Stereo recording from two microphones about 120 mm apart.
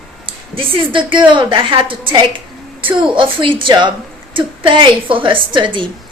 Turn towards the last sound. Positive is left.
turn(degrees=-40)  # may be behind; listen again after turning